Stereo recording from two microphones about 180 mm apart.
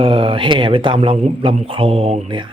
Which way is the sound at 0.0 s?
30° right (ahead or behind).